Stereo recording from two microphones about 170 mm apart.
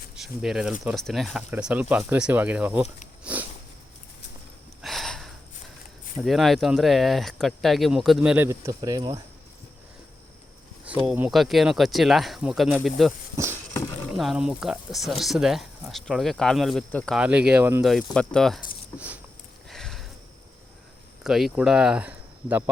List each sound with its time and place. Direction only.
0.2 s speech: 5° right (ahead or behind)
3.3 s a sound: 5° right (ahead or behind)
4.8 s a sound: centre (ahead or behind)
6.2 s speech: centre (ahead or behind)
8.4 s speech: 20° right (ahead or behind)
11.0 s speech: 5° right (ahead or behind)
13.3 s a sound: 15° right (ahead or behind)
14.2 s speech: 5° right (ahead or behind)
17.2 s speech: 5° right (ahead or behind)
17.8 s speech: 5° left (ahead or behind)
18.9 s a sound: 10° right (ahead or behind)
21.2 s speech: centre (ahead or behind)